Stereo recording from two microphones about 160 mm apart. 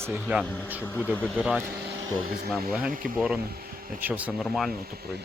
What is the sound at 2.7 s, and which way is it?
Speech, 5° right (ahead or behind).